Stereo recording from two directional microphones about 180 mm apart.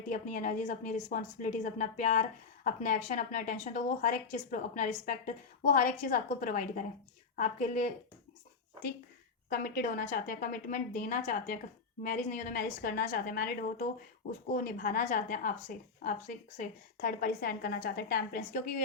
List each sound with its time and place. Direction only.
0.1 s a woman's voice: 45° left (ahead or behind)
9.5 s a woman's voice: 55° left (ahead or behind)